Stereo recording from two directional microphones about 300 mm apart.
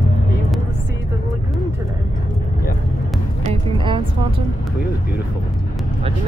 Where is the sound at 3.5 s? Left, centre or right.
Centre.